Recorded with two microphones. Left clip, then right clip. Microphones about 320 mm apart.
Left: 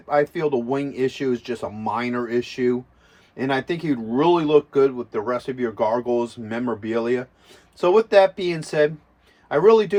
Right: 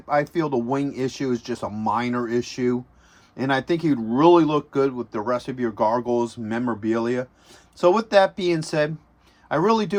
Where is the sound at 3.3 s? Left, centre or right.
Centre.